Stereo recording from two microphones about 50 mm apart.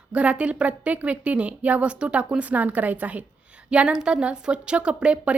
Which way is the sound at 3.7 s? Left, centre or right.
Centre.